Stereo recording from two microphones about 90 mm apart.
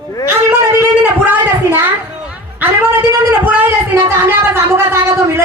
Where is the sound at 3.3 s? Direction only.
20° right (ahead or behind).